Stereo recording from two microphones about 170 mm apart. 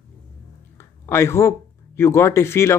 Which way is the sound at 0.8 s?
15° left (ahead or behind).